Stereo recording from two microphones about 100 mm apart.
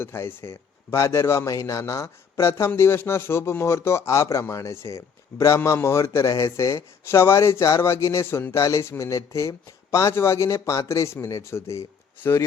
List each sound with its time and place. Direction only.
0.0 s a man's voice: 25° left (ahead or behind)